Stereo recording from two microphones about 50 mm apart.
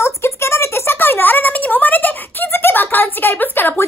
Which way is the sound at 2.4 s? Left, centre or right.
Left.